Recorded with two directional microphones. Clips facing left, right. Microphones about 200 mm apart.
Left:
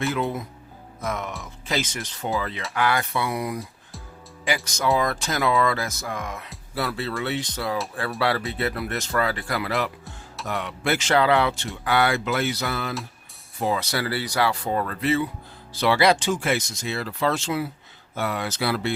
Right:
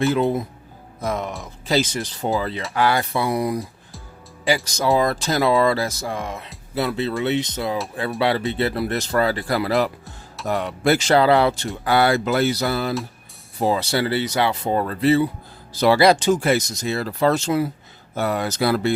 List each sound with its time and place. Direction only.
0.1 s speech: 30° right (ahead or behind)